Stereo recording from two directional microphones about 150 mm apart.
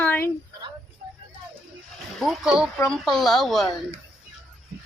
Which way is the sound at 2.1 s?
Centre (ahead or behind).